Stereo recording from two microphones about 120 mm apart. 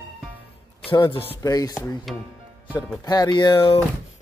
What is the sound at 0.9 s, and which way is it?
Music, 45° left (ahead or behind).